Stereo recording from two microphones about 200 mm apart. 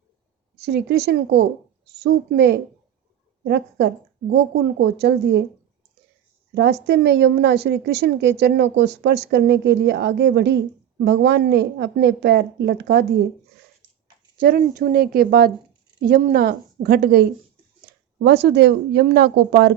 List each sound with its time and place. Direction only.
0.6 s a woman's voice: 55° right (ahead or behind)
6.5 s a woman's voice: 60° right (ahead or behind)
14.3 s a woman's voice: 45° right (ahead or behind)